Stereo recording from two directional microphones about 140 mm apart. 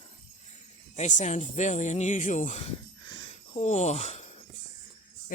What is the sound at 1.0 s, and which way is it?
Speech, 60° left (ahead or behind).